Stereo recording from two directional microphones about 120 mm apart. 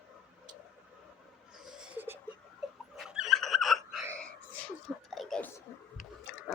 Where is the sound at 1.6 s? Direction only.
5° right (ahead or behind).